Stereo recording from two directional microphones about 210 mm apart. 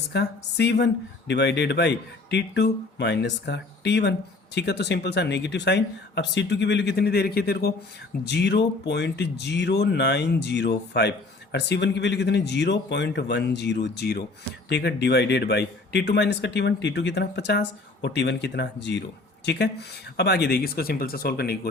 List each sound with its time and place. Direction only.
0.1 s speech: 50° left (ahead or behind)